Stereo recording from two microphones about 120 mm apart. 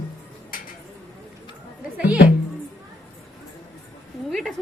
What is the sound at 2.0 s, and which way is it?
Speech, 10° right (ahead or behind).